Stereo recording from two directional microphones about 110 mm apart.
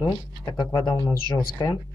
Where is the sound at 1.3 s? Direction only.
30° left (ahead or behind).